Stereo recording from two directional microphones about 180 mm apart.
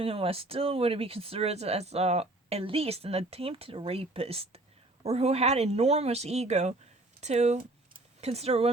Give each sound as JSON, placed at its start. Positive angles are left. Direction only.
{"t": 0.0, "sound": "speech", "side_deg": -30}